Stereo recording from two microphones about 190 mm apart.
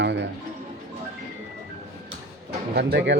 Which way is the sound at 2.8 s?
60° right (ahead or behind).